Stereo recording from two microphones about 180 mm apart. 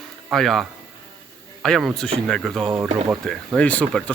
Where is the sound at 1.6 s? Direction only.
Centre (ahead or behind).